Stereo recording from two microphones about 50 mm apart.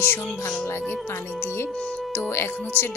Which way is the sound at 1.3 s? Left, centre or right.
Left.